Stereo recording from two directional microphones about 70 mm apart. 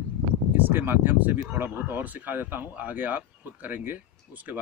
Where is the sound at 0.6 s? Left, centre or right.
Right.